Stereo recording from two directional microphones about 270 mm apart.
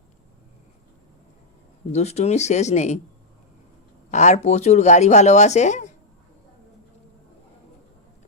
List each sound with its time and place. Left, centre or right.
1.9 s speech: left
4.1 s speech: left